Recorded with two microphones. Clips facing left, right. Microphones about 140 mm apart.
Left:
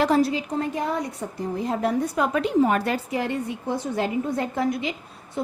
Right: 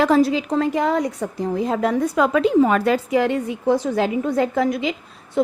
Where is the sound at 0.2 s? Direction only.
90° right.